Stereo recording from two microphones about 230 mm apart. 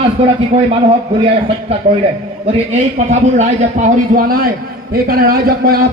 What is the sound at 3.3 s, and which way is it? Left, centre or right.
A man's voice, right.